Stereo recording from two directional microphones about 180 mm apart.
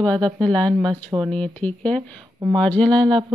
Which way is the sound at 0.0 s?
5° left (ahead or behind).